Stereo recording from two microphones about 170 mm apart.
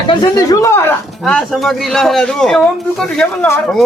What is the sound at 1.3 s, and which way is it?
Speech, centre (ahead or behind).